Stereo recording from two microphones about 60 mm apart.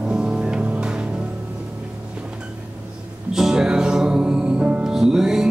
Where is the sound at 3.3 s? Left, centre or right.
Centre.